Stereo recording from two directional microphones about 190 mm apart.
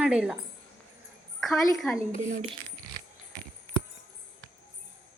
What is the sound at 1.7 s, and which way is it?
Speech, centre (ahead or behind).